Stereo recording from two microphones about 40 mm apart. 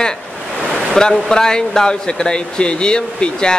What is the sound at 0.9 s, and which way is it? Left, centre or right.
Speech, centre.